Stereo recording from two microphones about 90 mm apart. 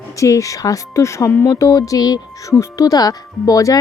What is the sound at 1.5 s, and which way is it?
Speech, 40° left (ahead or behind).